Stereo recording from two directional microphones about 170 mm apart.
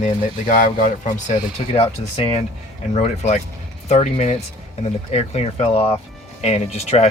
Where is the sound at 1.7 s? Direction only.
35° left (ahead or behind).